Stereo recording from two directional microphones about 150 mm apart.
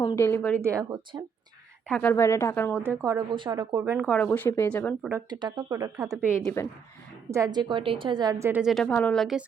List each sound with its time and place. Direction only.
0.2 s speech: 15° left (ahead or behind)
0.6 s a woman's voice: 20° right (ahead or behind)
1.9 s speech: 10° left (ahead or behind)
2.7 s a woman's voice: 15° right (ahead or behind)
4.0 s speech: 10° left (ahead or behind)
5.3 s a woman's voice: 30° right (ahead or behind)
6.4 s speech: 15° left (ahead or behind)
7.3 s a woman's voice: 20° right (ahead or behind)
8.6 s a woman's voice: 5° left (ahead or behind)